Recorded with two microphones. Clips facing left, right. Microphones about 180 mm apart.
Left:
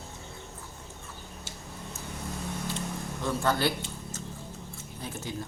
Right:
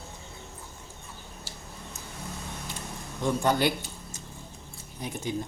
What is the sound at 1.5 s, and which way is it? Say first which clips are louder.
Tick-tock: left 1 dB; 20° left (ahead or behind).